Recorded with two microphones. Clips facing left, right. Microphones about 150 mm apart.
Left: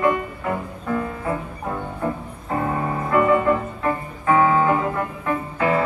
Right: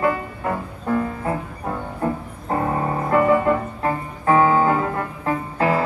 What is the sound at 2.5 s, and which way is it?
Music, 35° right (ahead or behind).